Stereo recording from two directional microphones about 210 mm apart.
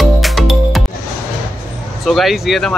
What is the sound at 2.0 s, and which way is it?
Speech, centre (ahead or behind).